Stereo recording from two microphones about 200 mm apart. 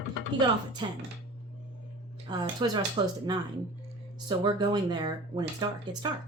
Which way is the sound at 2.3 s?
20° right (ahead or behind).